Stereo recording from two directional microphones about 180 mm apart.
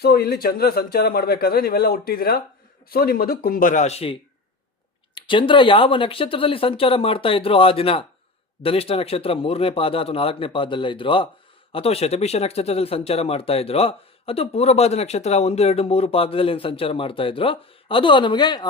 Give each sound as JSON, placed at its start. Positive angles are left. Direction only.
{"t": 0.0, "sound": "a man's voice", "side_deg": 60}